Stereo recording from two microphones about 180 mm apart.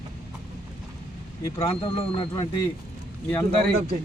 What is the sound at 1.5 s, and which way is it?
Speech, 30° left (ahead or behind).